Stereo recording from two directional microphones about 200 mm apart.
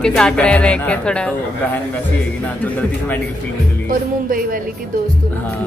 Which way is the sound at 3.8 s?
45° right (ahead or behind).